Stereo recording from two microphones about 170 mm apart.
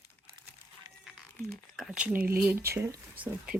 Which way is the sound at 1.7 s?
5° right (ahead or behind).